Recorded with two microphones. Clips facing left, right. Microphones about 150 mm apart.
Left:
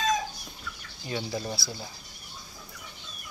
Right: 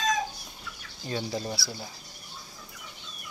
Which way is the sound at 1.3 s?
15° right (ahead or behind).